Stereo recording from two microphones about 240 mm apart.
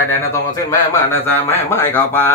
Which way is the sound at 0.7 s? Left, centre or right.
Centre.